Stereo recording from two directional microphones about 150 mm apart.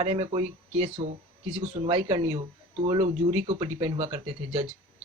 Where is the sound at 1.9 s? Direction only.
35° right (ahead or behind).